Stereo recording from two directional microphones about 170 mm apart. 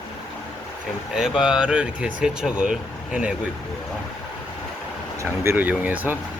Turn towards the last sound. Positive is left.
turn(degrees=-10)  # may be behind; listen again after turning